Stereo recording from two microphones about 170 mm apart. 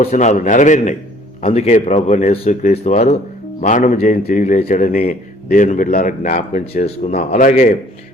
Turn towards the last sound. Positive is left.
turn(degrees=50)  # may be behind; listen again after turning